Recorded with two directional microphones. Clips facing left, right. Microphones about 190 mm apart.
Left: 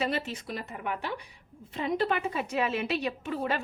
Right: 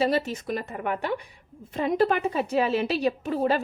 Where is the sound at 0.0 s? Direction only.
40° right (ahead or behind).